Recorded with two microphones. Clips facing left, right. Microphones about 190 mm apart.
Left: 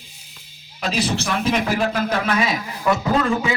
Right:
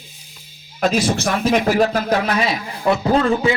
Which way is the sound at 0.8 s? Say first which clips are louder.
Right 5 dB; 50° right (ahead or behind).